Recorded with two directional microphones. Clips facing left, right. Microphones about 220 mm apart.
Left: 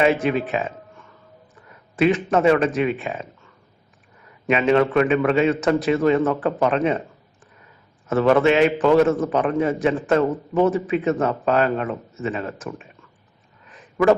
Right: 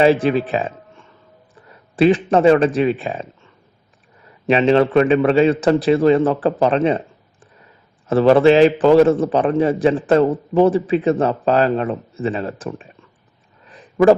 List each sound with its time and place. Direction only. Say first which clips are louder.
0.0 s a man's voice: right 5 dB; 30° right (ahead or behind)
4.4 s a man's voice: right 3 dB; 30° right (ahead or behind)
8.0 s a man's voice: right 5 dB; 30° right (ahead or behind)
13.7 s a sound: right 5 dB; 35° right (ahead or behind)